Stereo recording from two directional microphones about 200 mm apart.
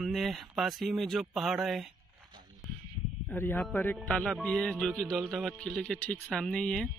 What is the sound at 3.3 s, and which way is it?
A man's voice, 10° left (ahead or behind).